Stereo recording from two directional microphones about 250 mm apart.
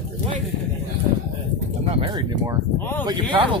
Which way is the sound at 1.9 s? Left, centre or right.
Right.